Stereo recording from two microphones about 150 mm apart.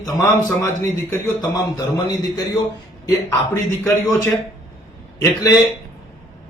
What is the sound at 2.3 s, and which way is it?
Speech, 25° left (ahead or behind).